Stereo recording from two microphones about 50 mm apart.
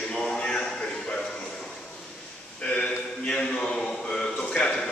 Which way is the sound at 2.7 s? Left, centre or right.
Left.